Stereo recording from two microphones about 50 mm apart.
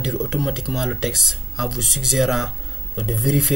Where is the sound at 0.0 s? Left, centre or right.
Centre.